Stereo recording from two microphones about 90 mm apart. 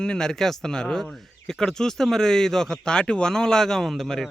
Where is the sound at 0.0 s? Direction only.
10° left (ahead or behind).